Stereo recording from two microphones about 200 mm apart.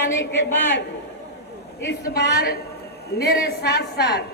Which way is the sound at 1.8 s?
60° left (ahead or behind).